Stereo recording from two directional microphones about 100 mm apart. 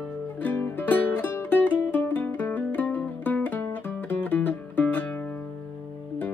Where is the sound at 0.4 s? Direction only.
20° left (ahead or behind).